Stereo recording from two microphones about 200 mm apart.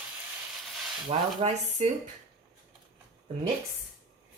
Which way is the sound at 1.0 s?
35° right (ahead or behind).